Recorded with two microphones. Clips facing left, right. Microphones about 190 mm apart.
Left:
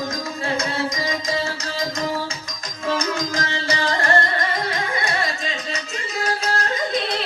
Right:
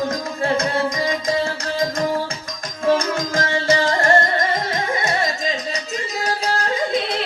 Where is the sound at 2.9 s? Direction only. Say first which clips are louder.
Right 5 dB; 50° right (ahead or behind).